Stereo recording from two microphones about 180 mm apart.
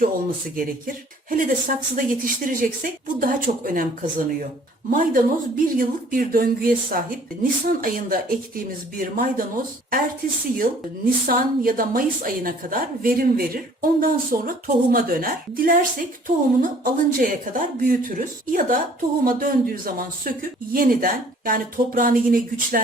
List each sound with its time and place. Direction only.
0.5 s a woman's voice: 50° right (ahead or behind)